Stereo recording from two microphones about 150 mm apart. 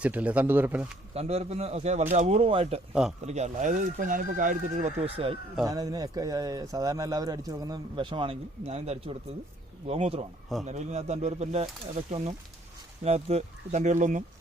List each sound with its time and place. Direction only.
0.0 s speech: 10° right (ahead or behind)
1.1 s speech: 45° right (ahead or behind)
2.9 s a man's voice: 5° right (ahead or behind)
3.2 s speech: 50° right (ahead or behind)
5.1 s speech: 40° right (ahead or behind)
5.6 s speech: 25° right (ahead or behind); by 14.3 s 55° right (ahead or behind)